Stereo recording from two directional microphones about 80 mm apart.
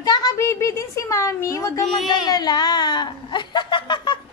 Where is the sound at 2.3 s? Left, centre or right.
Left.